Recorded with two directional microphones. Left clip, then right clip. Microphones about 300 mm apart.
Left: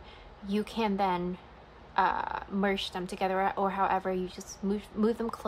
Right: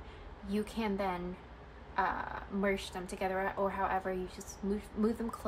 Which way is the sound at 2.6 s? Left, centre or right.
Centre.